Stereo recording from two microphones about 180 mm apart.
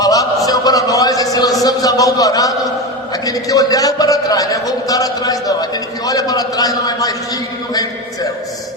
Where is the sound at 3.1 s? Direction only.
20° left (ahead or behind).